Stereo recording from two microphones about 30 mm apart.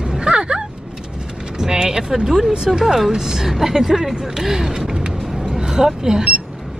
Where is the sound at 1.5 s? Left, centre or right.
Centre.